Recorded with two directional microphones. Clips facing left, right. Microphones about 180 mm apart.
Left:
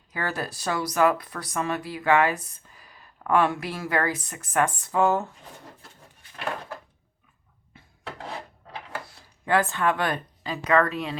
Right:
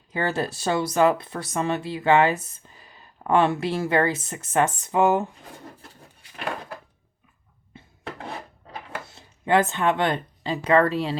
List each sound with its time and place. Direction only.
0.1 s speech: 25° right (ahead or behind)
9.0 s speech: 20° right (ahead or behind)